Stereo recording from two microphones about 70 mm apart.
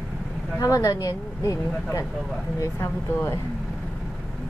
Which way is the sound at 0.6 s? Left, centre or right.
Left.